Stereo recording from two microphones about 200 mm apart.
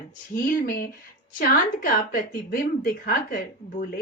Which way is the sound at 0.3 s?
50° left (ahead or behind).